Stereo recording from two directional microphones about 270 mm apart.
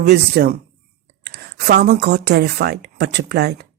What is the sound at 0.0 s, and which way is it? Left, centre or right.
Speech, right.